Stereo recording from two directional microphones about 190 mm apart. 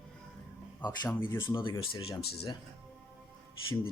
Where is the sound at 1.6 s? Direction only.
25° left (ahead or behind).